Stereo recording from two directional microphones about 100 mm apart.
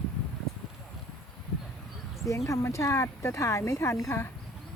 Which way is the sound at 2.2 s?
30° left (ahead or behind).